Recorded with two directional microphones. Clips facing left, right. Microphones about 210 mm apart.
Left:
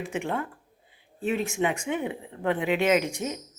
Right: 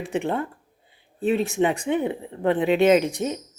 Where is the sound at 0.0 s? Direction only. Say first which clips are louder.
Right 5 dB; 35° right (ahead or behind).